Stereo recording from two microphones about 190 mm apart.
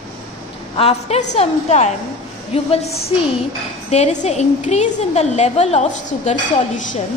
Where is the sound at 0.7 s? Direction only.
30° left (ahead or behind).